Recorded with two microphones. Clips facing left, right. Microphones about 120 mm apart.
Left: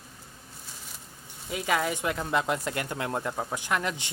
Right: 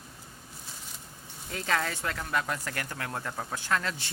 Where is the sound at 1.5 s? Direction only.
10° left (ahead or behind).